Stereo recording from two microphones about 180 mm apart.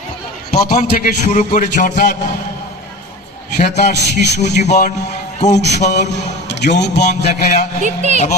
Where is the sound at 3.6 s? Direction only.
40° left (ahead or behind).